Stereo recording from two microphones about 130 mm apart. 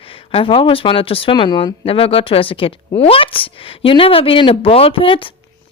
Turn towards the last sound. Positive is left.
turn(degrees=45)  # may be behind; listen again after turning